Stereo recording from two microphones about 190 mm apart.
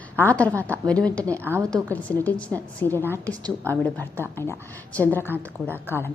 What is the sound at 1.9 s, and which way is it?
A woman's voice, 10° left (ahead or behind).